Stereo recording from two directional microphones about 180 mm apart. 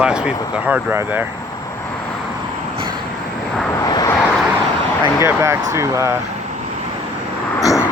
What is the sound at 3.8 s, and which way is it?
Vehicle, 20° left (ahead or behind).